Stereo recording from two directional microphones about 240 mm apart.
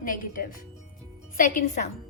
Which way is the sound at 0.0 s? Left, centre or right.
Left.